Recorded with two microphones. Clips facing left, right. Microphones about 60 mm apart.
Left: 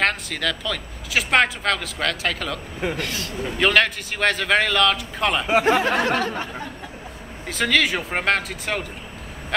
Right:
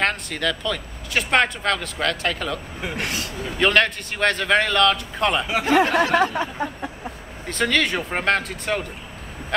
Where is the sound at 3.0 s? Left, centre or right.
Right.